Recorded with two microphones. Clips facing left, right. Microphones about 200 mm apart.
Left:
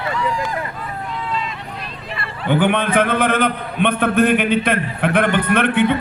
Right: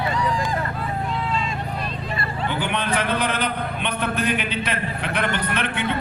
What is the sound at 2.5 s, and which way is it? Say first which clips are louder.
A man's voice: left 10 dB; 55° left (ahead or behind).